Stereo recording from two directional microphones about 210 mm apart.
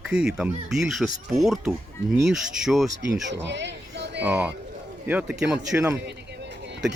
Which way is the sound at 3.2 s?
55° right (ahead or behind).